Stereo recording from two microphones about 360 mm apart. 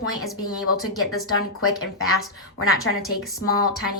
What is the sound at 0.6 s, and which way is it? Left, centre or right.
A woman's voice, left.